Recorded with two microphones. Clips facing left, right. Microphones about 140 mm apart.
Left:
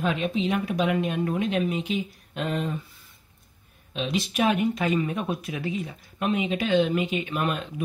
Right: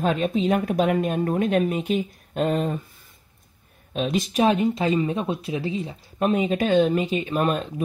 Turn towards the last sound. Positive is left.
turn(degrees=-40)  # may be behind; listen again after turning